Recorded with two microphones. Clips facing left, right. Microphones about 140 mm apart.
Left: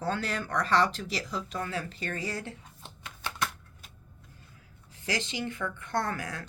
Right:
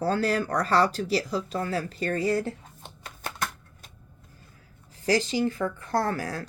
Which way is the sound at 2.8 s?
45° right (ahead or behind).